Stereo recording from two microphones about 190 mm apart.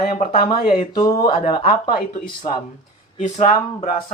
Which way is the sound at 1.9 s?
50° left (ahead or behind).